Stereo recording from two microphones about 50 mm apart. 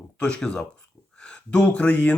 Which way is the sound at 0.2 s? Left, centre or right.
Centre.